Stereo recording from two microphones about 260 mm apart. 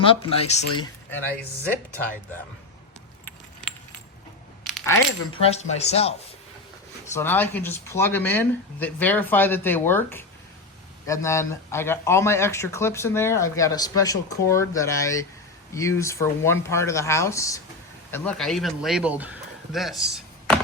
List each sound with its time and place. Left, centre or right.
0.0 s speech: left
4.6 s coin: centre
5.4 s speech: left
7.1 s speech: centre
19.7 s chopping: centre